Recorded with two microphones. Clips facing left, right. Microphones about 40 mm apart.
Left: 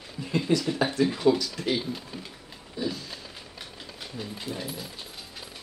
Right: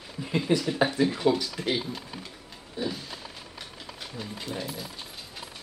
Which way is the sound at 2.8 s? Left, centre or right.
Right.